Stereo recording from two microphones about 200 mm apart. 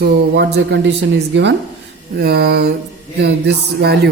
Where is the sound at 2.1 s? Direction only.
50° right (ahead or behind).